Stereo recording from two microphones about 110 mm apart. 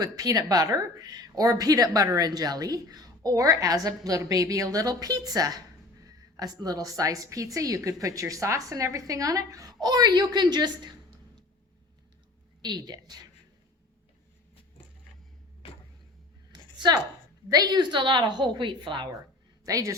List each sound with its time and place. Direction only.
0.0 s a woman's voice: 35° right (ahead or behind)
12.6 s a woman's voice: 40° right (ahead or behind)
16.5 s a sound: 40° right (ahead or behind)
17.5 s a woman's voice: 35° right (ahead or behind)
19.6 s speech: 30° right (ahead or behind)